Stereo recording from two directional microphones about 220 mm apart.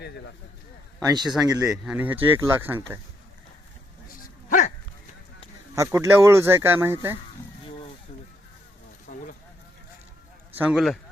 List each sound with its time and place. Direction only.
1.3 s speech: 5° right (ahead or behind)
4.4 s dog: 35° left (ahead or behind)
5.7 s speech: 15° right (ahead or behind)
9.1 s a sound: 40° left (ahead or behind)
10.5 s speech: 5° right (ahead or behind)